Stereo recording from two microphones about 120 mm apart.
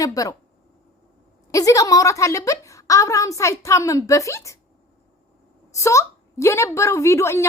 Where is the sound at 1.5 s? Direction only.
30° left (ahead or behind).